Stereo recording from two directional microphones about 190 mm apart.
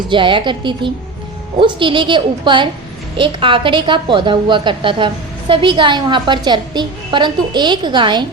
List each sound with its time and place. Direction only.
0.1 s a woman's voice: 25° right (ahead or behind)